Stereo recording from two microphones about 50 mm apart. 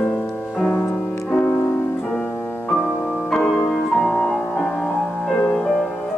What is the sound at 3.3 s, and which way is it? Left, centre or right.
Music, centre.